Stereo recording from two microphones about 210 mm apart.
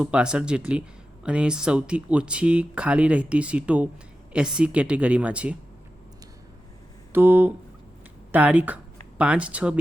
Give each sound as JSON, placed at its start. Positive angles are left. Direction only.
{"t": 0.0, "sound": "speech", "side_deg": -5}
{"t": 7.1, "sound": "a sound", "side_deg": -10}
{"t": 8.3, "sound": "speech", "side_deg": -5}